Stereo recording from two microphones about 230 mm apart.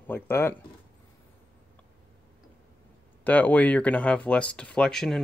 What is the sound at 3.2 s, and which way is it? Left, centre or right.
Speech, centre.